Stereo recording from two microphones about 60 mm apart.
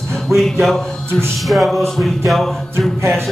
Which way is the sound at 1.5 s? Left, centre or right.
Centre.